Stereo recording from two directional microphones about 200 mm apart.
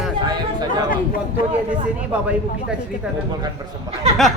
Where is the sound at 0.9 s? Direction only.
45° left (ahead or behind).